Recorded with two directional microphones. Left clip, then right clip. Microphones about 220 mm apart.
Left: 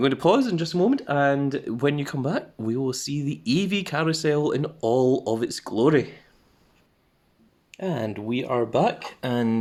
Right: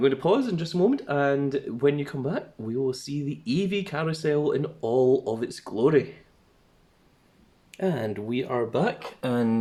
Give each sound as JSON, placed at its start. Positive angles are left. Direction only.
{"t": 0.0, "sound": "speech", "side_deg": 45}
{"t": 7.7, "sound": "speech", "side_deg": 15}